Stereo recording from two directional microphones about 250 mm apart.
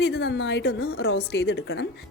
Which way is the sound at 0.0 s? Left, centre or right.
Left.